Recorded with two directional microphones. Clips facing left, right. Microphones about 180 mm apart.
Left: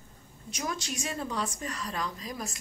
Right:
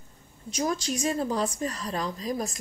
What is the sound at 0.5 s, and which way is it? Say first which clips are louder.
A woman's voice: right 7 dB; 35° right (ahead or behind).